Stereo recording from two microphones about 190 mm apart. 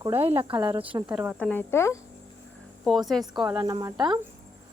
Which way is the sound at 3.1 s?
Centre (ahead or behind).